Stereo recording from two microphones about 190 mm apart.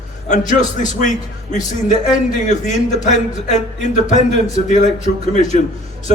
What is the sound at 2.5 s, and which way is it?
Speech, 40° left (ahead or behind).